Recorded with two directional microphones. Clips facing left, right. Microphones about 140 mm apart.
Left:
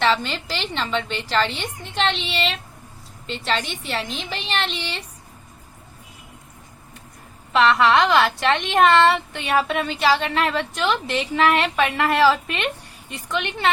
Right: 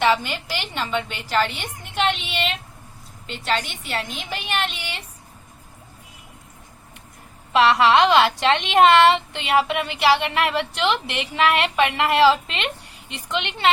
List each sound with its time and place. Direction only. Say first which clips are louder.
0.0 s a woman's voice: right 1 dB; 10° right (ahead or behind)
7.5 s a woman's voice: right 1 dB; 15° right (ahead or behind)